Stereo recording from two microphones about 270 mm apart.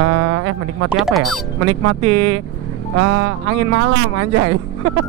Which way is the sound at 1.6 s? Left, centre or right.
Right.